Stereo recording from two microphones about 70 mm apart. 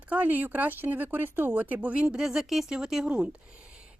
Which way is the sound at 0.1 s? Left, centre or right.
Right.